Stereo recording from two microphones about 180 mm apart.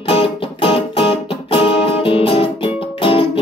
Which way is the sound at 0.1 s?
30° left (ahead or behind).